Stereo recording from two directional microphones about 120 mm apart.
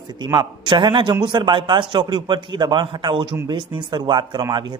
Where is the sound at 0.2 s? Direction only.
40° right (ahead or behind).